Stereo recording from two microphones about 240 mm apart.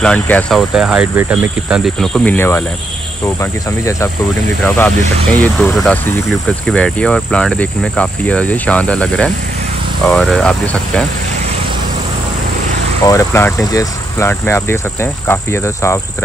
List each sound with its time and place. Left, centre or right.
0.0 s speech: centre
4.6 s speech: centre
13.0 s speech: centre